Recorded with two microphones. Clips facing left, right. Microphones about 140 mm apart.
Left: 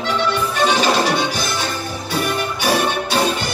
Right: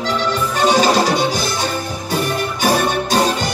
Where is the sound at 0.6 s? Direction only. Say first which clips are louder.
Right 3 dB; 40° right (ahead or behind).